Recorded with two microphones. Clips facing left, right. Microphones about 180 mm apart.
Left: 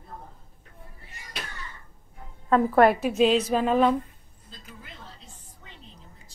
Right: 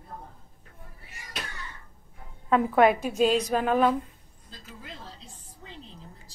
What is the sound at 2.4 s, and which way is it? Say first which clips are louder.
A woman's voice: left 2 dB; 5° right (ahead or behind).